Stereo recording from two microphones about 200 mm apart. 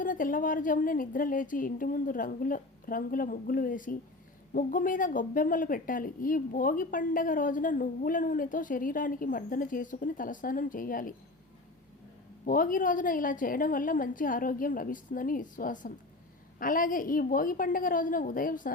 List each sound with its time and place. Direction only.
0.0 s speech: 40° left (ahead or behind)
12.5 s speech: 45° left (ahead or behind)